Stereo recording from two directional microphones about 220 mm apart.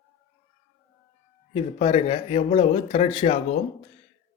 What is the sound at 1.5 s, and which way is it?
Speech, 25° left (ahead or behind).